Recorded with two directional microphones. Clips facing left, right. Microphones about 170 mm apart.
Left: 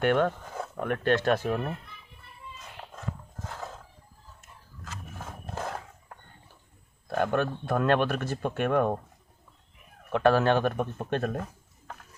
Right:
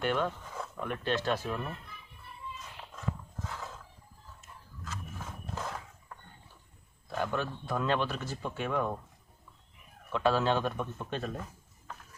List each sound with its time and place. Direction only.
0.0 s speech: 60° left (ahead or behind)
2.8 s walk: 50° left (ahead or behind)
5.5 s a sound: 55° left (ahead or behind)
7.1 s speech: 60° left (ahead or behind)
10.1 s speech: 60° left (ahead or behind)